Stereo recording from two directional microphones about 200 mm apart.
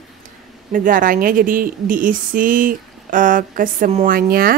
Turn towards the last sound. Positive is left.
turn(degrees=-45)  # may be behind; listen again after turning